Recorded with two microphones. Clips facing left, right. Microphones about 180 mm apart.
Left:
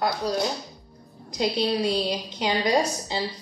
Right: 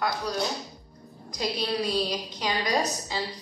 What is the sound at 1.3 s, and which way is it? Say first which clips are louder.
A woman's voice: left 5 dB; 25° left (ahead or behind).